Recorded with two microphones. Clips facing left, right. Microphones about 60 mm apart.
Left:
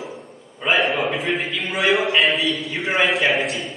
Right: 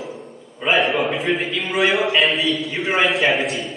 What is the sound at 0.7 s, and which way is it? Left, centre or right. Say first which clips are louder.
A man's voice: right 1 dB; centre.